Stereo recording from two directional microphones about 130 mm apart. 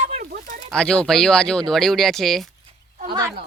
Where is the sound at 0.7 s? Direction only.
5° left (ahead or behind).